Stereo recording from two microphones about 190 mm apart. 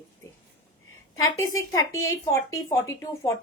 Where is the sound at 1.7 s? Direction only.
15° left (ahead or behind).